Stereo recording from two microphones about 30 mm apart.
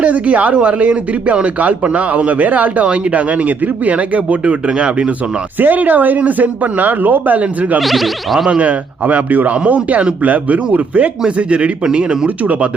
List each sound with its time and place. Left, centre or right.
0.0 s speech: right
2.8 s speech: right
5.5 s speech: right
7.8 s speech: centre
8.4 s speech: right
11.9 s speech: right